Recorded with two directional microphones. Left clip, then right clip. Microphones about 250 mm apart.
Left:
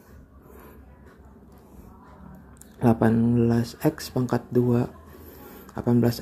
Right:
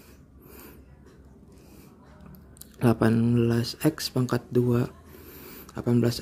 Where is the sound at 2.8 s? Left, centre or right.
Centre.